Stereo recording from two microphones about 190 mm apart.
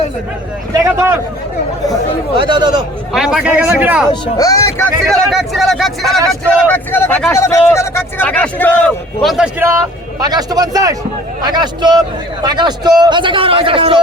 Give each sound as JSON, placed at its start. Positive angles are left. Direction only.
{"t": 0.7, "sound": "speech", "side_deg": -15}
{"t": 2.3, "sound": "a man's voice", "side_deg": -25}
{"t": 3.1, "sound": "speech", "side_deg": -5}
{"t": 4.1, "sound": "speech", "side_deg": 20}
{"t": 5.0, "sound": "speech", "side_deg": 0}
{"t": 10.2, "sound": "a man's voice", "side_deg": -20}